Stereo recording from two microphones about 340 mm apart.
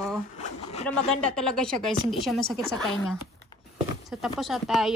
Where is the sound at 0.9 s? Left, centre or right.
Centre.